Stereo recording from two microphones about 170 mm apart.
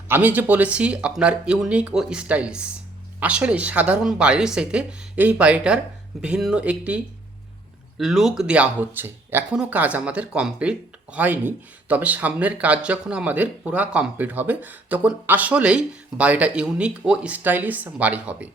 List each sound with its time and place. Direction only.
0.1 s speech: 10° right (ahead or behind)